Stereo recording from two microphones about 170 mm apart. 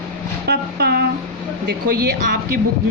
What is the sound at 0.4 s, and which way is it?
Speech, 65° right (ahead or behind).